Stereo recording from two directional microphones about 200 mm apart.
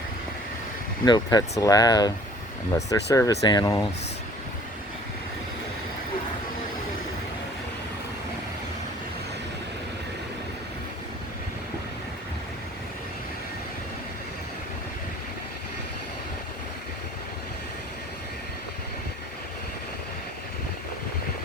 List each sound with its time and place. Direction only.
1.0 s speech: 20° left (ahead or behind)